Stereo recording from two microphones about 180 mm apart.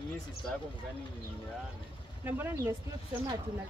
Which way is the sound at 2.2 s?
10° right (ahead or behind).